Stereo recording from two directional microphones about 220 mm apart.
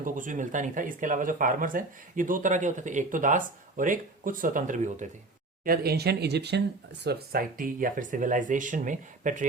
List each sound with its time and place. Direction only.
0.0 s speech: 35° right (ahead or behind)